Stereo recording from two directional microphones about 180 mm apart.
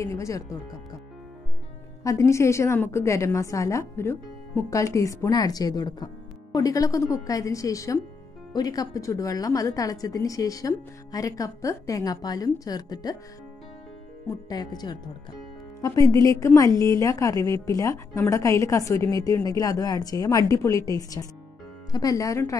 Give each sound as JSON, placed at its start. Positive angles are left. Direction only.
{"t": 0.0, "sound": "a woman's voice", "side_deg": 15}
{"t": 2.0, "sound": "a woman's voice", "side_deg": 15}
{"t": 14.5, "sound": "a woman's voice", "side_deg": 20}